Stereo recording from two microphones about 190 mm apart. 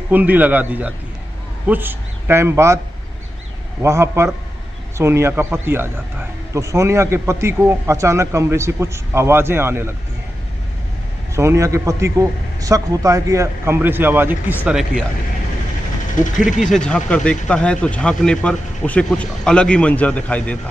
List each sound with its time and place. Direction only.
0.1 s a man's voice: 10° right (ahead or behind)
3.8 s a man's voice: 15° right (ahead or behind)
11.3 s a man's voice: 15° right (ahead or behind)
16.2 s speech: 45° left (ahead or behind)
16.6 s speech: 5° left (ahead or behind)